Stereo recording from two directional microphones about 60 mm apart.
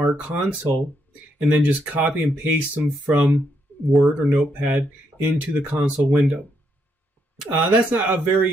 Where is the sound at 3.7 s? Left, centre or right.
Left.